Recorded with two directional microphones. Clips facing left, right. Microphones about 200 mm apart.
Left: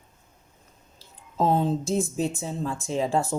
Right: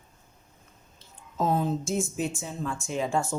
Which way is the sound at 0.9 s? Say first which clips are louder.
Left 4 dB; 30° left (ahead or behind).